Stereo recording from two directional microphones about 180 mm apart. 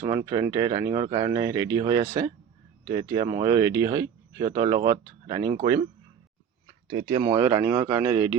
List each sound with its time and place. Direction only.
0.0 s speech: 15° right (ahead or behind)
6.8 s speech: 25° right (ahead or behind)